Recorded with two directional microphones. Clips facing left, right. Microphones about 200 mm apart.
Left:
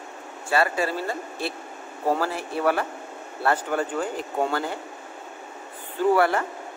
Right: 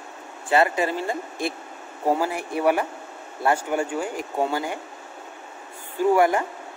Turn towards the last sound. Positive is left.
turn(degrees=-15)  # may be behind; listen again after turning